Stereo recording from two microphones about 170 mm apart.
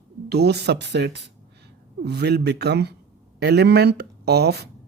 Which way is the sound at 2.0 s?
75° right (ahead or behind).